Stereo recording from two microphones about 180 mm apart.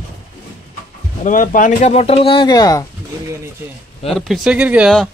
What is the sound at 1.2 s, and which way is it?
Speech, 45° left (ahead or behind).